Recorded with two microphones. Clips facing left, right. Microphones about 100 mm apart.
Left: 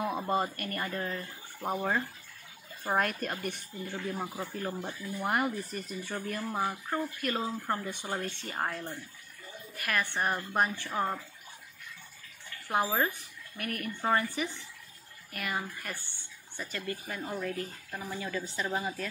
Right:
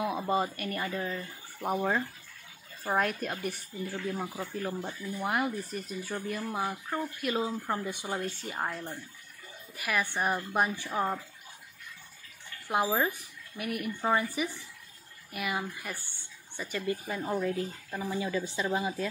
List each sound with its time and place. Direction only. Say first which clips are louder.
0.0 s speech: right 1 dB; 5° right (ahead or behind); by 4.9 s 10° left (ahead or behind)
5.0 s speech: even; centre (ahead or behind)
12.6 s speech: right 1 dB; 15° right (ahead or behind)